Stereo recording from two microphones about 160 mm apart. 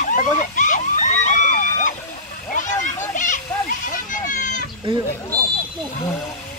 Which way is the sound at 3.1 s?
55° left (ahead or behind).